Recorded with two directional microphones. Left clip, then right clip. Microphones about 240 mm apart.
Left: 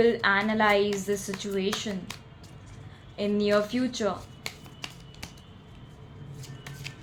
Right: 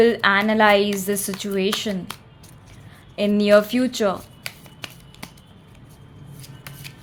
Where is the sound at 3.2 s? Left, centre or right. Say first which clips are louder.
Right 9 dB; right.